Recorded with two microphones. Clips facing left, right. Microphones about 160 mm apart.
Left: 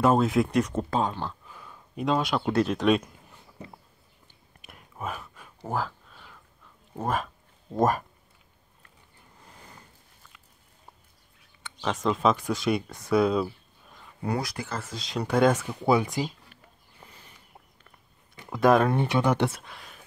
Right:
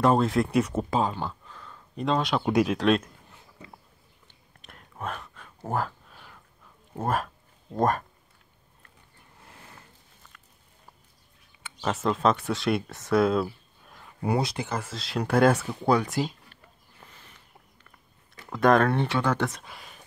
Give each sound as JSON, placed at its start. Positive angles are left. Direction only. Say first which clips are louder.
{"t": 0.0, "sound": "speech", "louder": "even", "side_deg": 0}
{"t": 1.5, "sound": "a sound", "louder": "even", "side_deg": 10}
{"t": 2.4, "sound": "speech", "louder": "right 2 dB", "side_deg": -10}
{"t": 4.6, "sound": "a sound", "louder": "even", "side_deg": 5}
{"t": 6.9, "sound": "speech", "louder": "right 1 dB", "side_deg": -5}
{"t": 7.7, "sound": "speech", "louder": "left 1 dB", "side_deg": 5}
{"t": 11.8, "sound": "speech", "louder": "even", "side_deg": -5}
{"t": 14.2, "sound": "speech", "louder": "right 3 dB", "side_deg": -25}
{"t": 14.9, "sound": "speech", "louder": "right 1 dB", "side_deg": 0}
{"t": 18.3, "sound": "a sound", "louder": "even", "side_deg": 15}
{"t": 18.6, "sound": "speech", "louder": "even", "side_deg": 5}
{"t": 19.6, "sound": "speech", "louder": "right 1 dB", "side_deg": -5}